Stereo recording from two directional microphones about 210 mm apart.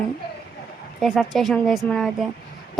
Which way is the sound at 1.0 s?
Centre (ahead or behind).